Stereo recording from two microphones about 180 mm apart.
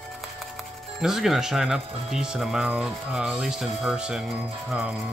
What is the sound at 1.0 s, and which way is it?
Speech, centre (ahead or behind).